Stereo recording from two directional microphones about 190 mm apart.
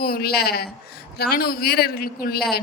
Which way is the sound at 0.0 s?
50° left (ahead or behind).